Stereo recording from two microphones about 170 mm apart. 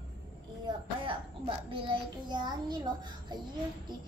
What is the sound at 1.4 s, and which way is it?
A child's voice, 30° right (ahead or behind).